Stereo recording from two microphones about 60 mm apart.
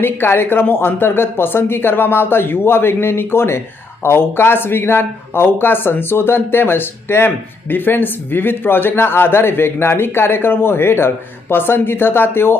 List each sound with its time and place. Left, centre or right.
0.0 s speech: left